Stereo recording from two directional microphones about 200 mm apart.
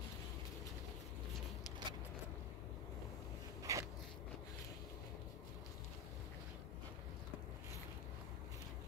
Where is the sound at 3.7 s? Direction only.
15° right (ahead or behind).